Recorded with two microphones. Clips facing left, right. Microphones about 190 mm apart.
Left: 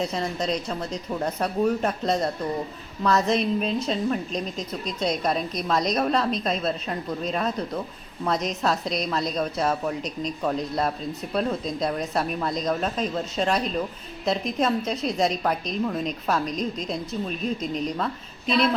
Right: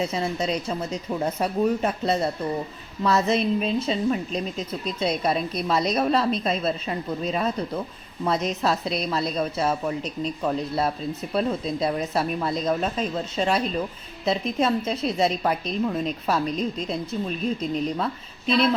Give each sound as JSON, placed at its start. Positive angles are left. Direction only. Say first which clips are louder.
{"t": 0.0, "sound": "a woman's voice", "louder": "right 1 dB", "side_deg": -5}